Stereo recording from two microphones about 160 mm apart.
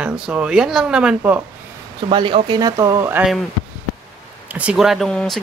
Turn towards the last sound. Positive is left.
turn(degrees=5)  # may be behind; listen again after turning